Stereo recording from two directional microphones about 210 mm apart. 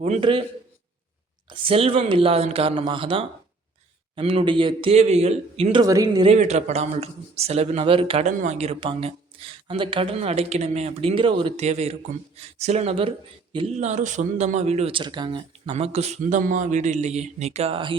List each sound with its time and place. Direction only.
0.0 s speech: 25° right (ahead or behind)
1.5 s speech: 25° right (ahead or behind)
5.8 s speech: 15° right (ahead or behind)
6.2 s speech: 30° right (ahead or behind)